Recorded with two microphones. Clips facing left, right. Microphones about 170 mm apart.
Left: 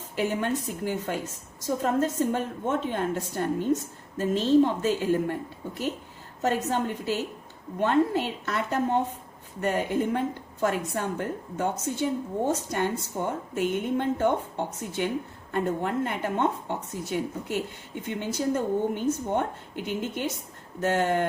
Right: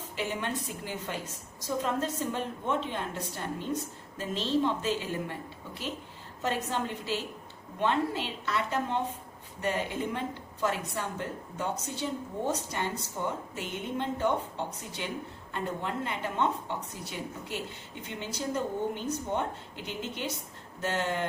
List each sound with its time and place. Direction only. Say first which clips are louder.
0.2 s a woman's voice: left 7 dB; 45° left (ahead or behind)